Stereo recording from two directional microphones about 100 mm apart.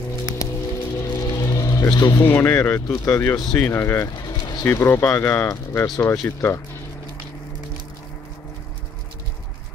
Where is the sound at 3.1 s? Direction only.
20° left (ahead or behind).